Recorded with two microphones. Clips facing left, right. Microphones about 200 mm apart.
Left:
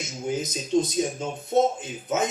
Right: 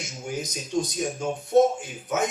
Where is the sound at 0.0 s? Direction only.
20° left (ahead or behind).